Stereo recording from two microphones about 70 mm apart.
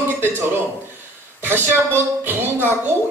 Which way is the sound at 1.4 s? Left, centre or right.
Right.